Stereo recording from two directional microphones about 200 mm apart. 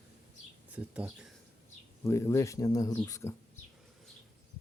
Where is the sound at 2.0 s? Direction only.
15° left (ahead or behind).